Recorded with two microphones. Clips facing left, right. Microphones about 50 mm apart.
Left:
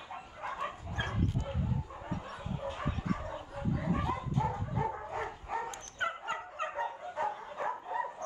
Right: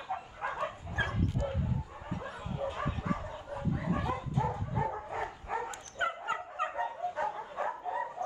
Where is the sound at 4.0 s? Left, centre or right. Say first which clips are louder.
Even; centre.